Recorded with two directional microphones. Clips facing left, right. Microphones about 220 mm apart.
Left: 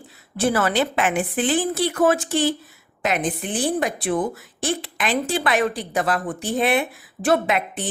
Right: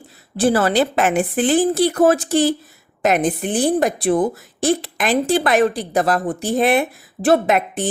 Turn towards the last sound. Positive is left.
turn(degrees=-40)  # may be behind; listen again after turning